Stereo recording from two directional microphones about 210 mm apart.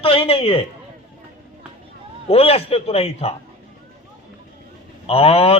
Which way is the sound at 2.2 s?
30° left (ahead or behind).